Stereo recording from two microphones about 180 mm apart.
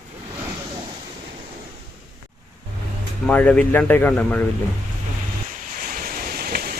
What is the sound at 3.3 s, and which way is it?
Speech, 5° left (ahead or behind).